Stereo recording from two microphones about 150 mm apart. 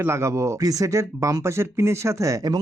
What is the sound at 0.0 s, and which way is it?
Speech, 15° right (ahead or behind).